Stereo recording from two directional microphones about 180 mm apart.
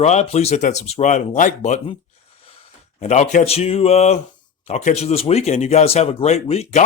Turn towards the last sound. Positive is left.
turn(degrees=35)  # may be behind; listen again after turning